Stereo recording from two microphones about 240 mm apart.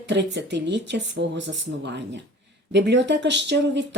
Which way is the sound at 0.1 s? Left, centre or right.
Right.